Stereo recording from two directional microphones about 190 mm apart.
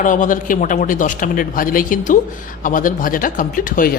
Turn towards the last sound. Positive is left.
turn(degrees=45)  # may be behind; listen again after turning